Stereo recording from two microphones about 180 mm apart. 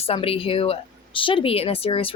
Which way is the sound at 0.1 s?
30° left (ahead or behind).